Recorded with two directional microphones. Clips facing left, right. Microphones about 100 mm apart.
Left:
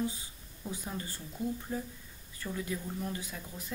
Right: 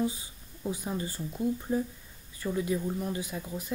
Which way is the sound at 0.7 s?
15° right (ahead or behind).